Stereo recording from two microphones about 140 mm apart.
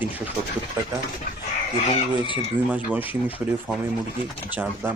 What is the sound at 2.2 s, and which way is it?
Speech, 35° left (ahead or behind).